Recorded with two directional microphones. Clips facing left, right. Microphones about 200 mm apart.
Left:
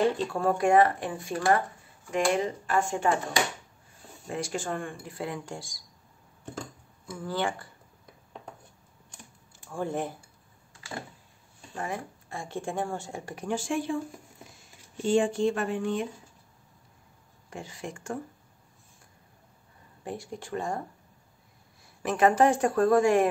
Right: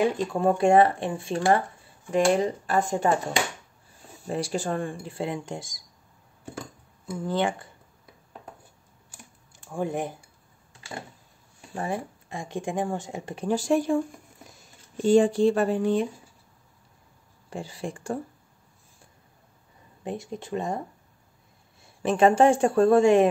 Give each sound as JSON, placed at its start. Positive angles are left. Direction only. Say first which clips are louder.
{"t": 0.0, "sound": "speech", "louder": "right 2 dB", "side_deg": -15}
{"t": 4.3, "sound": "speech", "louder": "right 4 dB", "side_deg": -35}
{"t": 7.2, "sound": "speech", "louder": "right 4 dB", "side_deg": -20}
{"t": 9.7, "sound": "speech", "louder": "right 2 dB", "side_deg": -15}
{"t": 11.7, "sound": "speech", "louder": "right 4 dB", "side_deg": -30}
{"t": 12.3, "sound": "speech", "louder": "right 3 dB", "side_deg": -15}
{"t": 15.0, "sound": "speech", "louder": "right 5 dB", "side_deg": -40}
{"t": 17.5, "sound": "speech", "louder": "right 5 dB", "side_deg": -30}
{"t": 20.0, "sound": "speech", "louder": "right 4 dB", "side_deg": -20}
{"t": 21.8, "sound": "speech", "louder": "right 4 dB", "side_deg": -25}